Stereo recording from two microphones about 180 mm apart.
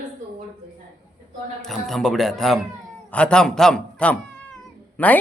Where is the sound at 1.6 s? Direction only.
Centre (ahead or behind).